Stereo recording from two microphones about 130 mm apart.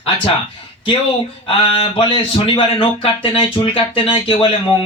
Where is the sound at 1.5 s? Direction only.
45° left (ahead or behind).